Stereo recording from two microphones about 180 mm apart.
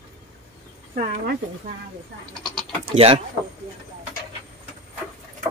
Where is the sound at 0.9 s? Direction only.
50° right (ahead or behind).